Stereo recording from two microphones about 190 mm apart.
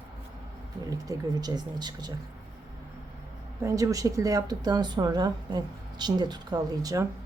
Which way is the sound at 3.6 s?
15° right (ahead or behind).